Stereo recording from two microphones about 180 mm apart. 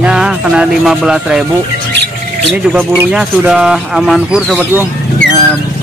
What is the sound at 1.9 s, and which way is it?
Rodents, 75° right (ahead or behind).